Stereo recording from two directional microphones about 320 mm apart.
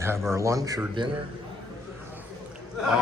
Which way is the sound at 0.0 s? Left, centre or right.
Centre.